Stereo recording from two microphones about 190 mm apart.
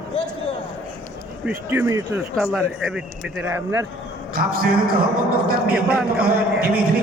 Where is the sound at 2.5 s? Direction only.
Centre (ahead or behind).